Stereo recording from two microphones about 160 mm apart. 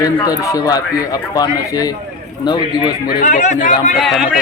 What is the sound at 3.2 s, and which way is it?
Speech, 55° left (ahead or behind).